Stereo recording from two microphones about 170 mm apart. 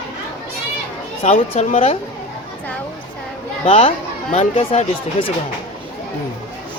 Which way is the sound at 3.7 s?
35° left (ahead or behind).